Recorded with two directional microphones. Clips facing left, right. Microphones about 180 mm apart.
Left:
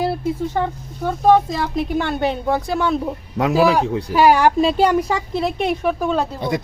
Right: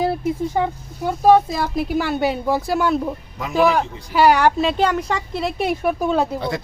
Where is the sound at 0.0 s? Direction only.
15° right (ahead or behind).